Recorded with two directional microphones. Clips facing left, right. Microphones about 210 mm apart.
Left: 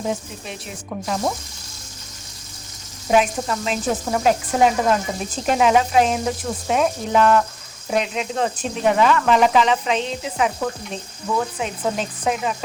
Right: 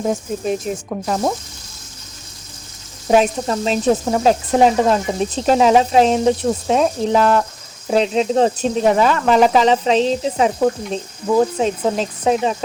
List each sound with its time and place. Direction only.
0.0 s sizzle: 40° right (ahead or behind)
3.1 s speech: 35° right (ahead or behind)